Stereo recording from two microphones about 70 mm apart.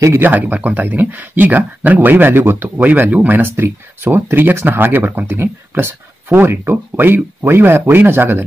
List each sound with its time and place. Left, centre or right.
0.2 s speech: right